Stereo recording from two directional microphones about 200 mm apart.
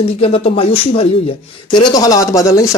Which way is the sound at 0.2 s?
30° left (ahead or behind).